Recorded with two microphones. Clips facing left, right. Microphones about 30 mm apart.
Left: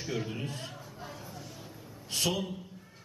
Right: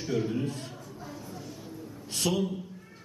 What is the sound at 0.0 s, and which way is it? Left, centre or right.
Speech, centre.